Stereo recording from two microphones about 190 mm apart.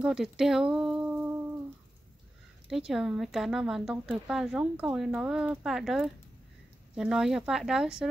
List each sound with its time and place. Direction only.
0.0 s speech: 5° right (ahead or behind)
2.7 s a woman's voice: centre (ahead or behind)